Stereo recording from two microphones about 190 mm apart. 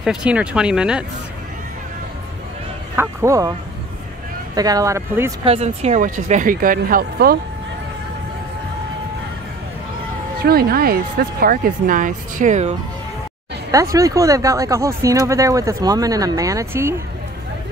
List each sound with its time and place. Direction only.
0.0 s speech: 5° right (ahead or behind)
3.0 s speech: 15° right (ahead or behind)
4.6 s speech: 20° right (ahead or behind)
5.4 s speech: 30° right (ahead or behind); by 7.3 s 50° right (ahead or behind)
10.4 s speech: 55° right (ahead or behind)
13.7 s speech: 15° right (ahead or behind)